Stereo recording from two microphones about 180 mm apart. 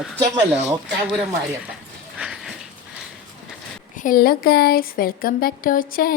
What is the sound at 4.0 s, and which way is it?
Speech, 55° left (ahead or behind).